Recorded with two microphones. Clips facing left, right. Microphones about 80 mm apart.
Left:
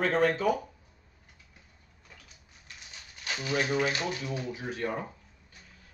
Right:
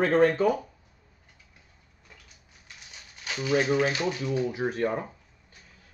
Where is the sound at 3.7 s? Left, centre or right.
Right.